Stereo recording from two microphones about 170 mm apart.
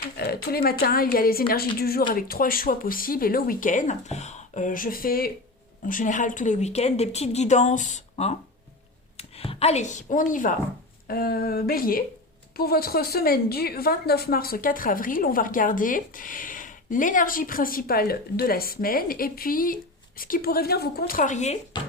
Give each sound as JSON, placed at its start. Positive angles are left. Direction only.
{"t": 0.2, "sound": "a woman's voice", "side_deg": 65}
{"t": 11.1, "sound": "a woman's voice", "side_deg": 65}
{"t": 21.1, "sound": "a woman's voice", "side_deg": 50}